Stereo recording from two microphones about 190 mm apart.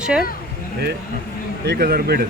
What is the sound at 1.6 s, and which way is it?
Speech, 55° right (ahead or behind).